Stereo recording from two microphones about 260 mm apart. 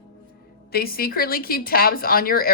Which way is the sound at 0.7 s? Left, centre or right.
Left.